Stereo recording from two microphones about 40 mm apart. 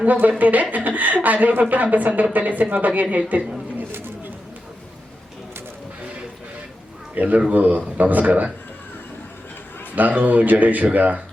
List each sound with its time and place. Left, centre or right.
0.0 s speech: right
7.2 s speech: right
9.9 s speech: right